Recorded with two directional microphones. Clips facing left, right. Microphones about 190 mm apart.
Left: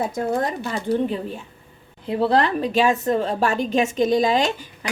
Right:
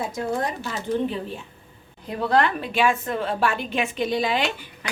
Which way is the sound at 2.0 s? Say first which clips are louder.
Left 3 dB; 30° left (ahead or behind).